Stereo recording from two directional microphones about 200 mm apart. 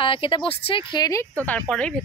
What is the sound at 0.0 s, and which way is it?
Speech, 25° left (ahead or behind).